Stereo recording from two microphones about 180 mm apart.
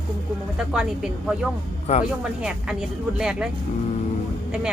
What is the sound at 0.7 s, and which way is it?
Speech, centre (ahead or behind).